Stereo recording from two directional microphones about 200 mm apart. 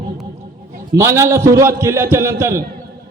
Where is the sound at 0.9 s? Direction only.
15° right (ahead or behind).